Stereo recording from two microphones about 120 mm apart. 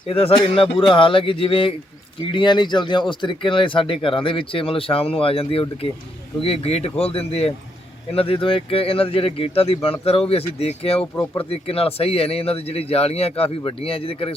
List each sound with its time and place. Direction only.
0.1 s speech: 50° left (ahead or behind)